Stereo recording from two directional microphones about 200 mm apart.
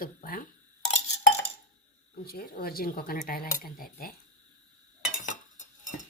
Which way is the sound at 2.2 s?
50° left (ahead or behind).